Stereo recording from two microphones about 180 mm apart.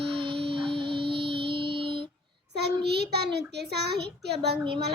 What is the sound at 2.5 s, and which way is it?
Child singing, 65° right (ahead or behind).